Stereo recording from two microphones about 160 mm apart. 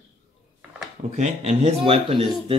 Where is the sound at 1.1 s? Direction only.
45° right (ahead or behind).